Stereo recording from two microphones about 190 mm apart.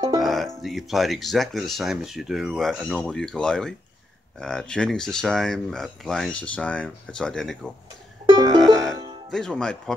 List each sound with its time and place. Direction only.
0.2 s music: centre (ahead or behind)
0.6 s speech: centre (ahead or behind)
8.3 s music: 20° right (ahead or behind)
8.5 s music: centre (ahead or behind)
9.3 s speech: 5° left (ahead or behind)